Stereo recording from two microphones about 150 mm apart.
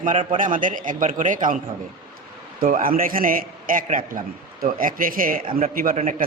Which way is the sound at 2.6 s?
70° right (ahead or behind).